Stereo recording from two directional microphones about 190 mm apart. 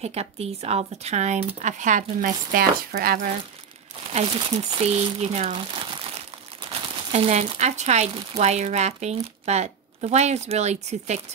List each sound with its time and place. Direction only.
0.0 s speech: 35° right (ahead or behind)
4.1 s speech: 30° right (ahead or behind)